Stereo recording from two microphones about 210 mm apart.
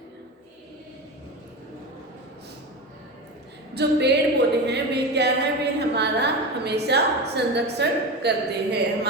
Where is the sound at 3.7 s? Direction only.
55° right (ahead or behind).